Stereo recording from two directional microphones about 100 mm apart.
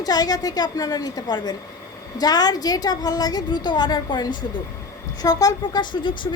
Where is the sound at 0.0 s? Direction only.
40° left (ahead or behind).